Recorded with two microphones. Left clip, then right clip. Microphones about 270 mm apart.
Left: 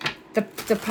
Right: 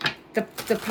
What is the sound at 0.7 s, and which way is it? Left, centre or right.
Speech, centre.